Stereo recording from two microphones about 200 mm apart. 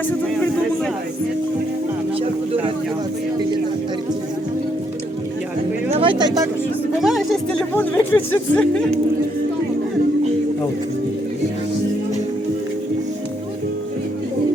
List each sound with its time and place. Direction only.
5.9 s vehicle: 25° right (ahead or behind)
7.0 s speech: centre (ahead or behind)